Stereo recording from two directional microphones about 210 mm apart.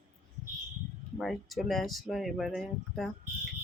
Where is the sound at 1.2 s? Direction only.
Centre (ahead or behind).